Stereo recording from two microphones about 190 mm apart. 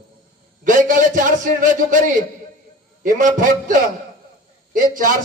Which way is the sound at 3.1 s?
45° right (ahead or behind).